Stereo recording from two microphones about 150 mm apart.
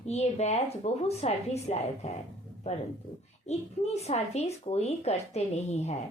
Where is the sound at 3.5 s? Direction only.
45° left (ahead or behind).